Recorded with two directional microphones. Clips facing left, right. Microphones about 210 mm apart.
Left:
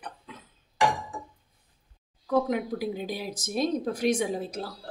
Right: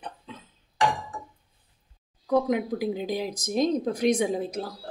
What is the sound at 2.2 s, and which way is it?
Speech, 15° right (ahead or behind).